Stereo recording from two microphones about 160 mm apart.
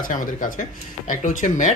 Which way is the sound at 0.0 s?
55° left (ahead or behind).